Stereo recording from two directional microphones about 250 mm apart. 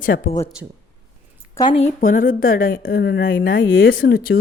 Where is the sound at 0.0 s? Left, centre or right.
Left.